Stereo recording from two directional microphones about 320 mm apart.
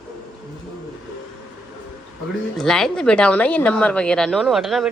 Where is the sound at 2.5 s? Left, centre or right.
Centre.